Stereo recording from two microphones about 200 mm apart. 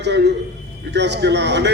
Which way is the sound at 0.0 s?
60° right (ahead or behind).